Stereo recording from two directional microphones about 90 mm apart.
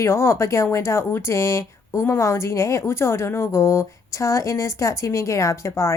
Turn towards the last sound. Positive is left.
turn(degrees=35)  # may be behind; listen again after turning